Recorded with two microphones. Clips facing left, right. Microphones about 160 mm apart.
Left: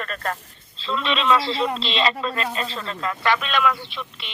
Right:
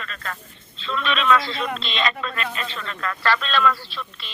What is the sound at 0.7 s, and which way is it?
A man's voice, 30° left (ahead or behind).